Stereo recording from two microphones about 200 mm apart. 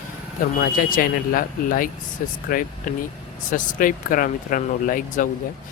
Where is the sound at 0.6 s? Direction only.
45° left (ahead or behind).